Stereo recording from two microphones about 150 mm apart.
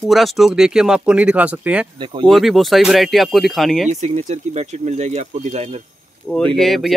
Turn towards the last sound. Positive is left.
turn(degrees=0)  # may be behind; listen again after turning